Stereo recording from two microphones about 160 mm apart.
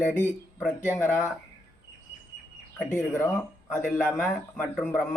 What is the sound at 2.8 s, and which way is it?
Speech, 15° left (ahead or behind).